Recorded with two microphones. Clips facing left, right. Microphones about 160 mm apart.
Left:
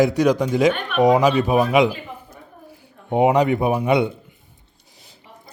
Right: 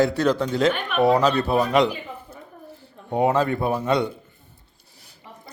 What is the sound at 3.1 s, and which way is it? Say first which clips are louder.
A man's voice: left 4 dB; 20° left (ahead or behind).